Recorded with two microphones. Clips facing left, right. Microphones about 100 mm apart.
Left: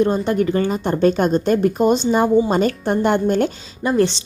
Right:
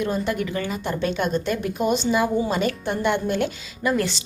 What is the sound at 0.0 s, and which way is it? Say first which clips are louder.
Speech: left 7 dB; 35° left (ahead or behind).